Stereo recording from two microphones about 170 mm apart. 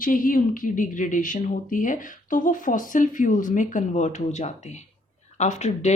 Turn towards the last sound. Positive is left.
turn(degrees=40)  # may be behind; listen again after turning